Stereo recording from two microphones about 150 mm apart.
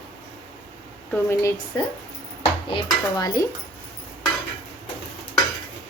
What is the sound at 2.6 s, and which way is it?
Dishes, 30° left (ahead or behind).